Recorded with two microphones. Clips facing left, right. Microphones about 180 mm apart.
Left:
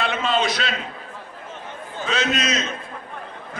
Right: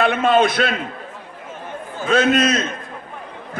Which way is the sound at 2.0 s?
55° right (ahead or behind).